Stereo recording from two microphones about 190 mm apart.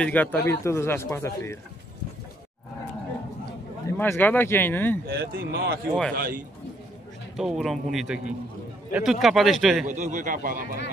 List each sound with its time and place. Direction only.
0.0 s speech: 10° left (ahead or behind)
3.8 s speech: 10° left (ahead or behind)
5.0 s speech: 55° right (ahead or behind)
7.3 s speech: centre (ahead or behind)
9.8 s speech: 40° right (ahead or behind)